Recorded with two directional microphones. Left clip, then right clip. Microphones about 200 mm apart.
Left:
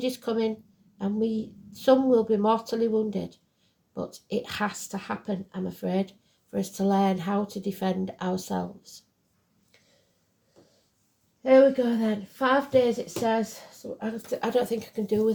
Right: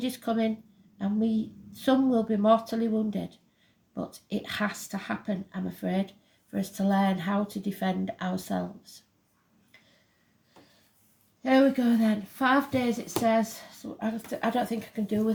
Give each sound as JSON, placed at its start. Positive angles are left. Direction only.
{"t": 0.0, "sound": "a woman's voice", "side_deg": 30}
{"t": 11.4, "sound": "a woman's voice", "side_deg": 25}
{"t": 14.3, "sound": "speech", "side_deg": 35}